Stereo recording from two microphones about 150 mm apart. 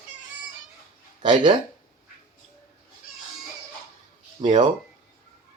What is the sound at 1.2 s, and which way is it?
Speech, 30° right (ahead or behind).